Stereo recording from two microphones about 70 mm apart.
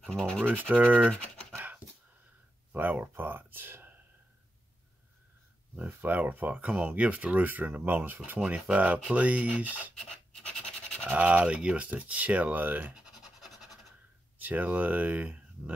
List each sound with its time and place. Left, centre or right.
0.1 s speech: centre
0.5 s speech: right
2.7 s speech: right
5.8 s speech: right
11.1 s speech: right
13.4 s scratch: centre
14.4 s speech: right